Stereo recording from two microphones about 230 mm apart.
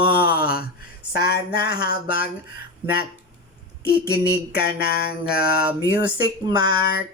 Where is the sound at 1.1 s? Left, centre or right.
Left.